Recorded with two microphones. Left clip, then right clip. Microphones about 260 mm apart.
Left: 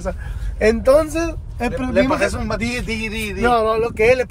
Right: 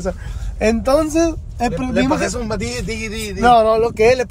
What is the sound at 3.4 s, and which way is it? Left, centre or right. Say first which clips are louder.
Speech: right 5 dB; centre.